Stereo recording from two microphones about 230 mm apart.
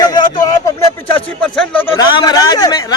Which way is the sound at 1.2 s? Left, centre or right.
Centre.